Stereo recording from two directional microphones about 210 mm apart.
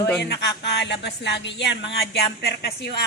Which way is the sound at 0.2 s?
55° left (ahead or behind).